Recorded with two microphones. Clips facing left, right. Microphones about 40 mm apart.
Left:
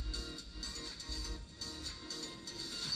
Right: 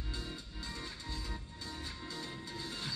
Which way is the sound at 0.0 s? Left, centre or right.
Right.